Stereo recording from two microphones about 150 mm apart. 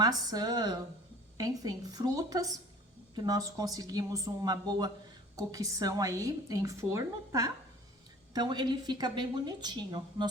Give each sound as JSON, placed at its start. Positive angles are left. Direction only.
{"t": 0.0, "sound": "a woman's voice", "side_deg": -25}